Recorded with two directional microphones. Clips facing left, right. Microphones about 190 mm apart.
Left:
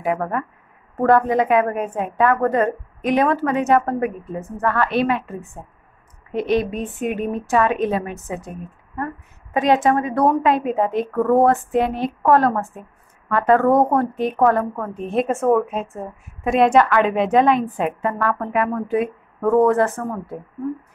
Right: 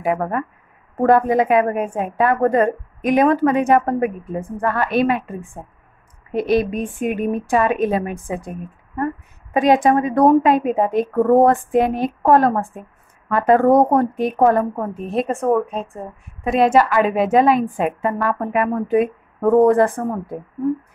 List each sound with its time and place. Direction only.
0.0 s a woman's voice: 10° right (ahead or behind)
15.0 s a woman's voice: centre (ahead or behind)